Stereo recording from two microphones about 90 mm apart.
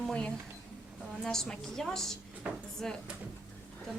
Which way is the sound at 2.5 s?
10° right (ahead or behind).